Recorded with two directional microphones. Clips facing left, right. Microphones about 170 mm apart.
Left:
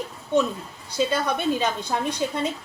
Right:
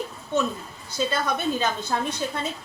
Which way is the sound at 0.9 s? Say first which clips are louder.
Left 2 dB; 10° left (ahead or behind).